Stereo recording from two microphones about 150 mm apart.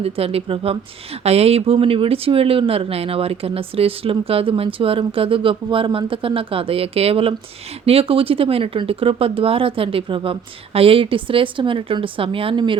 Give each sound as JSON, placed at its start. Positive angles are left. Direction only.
{"t": 0.0, "sound": "speech", "side_deg": -40}